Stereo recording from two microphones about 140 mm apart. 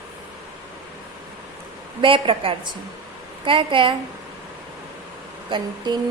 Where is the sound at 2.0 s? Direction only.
40° right (ahead or behind).